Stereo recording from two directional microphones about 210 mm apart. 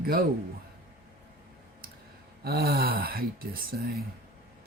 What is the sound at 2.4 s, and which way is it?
Speech, 50° right (ahead or behind).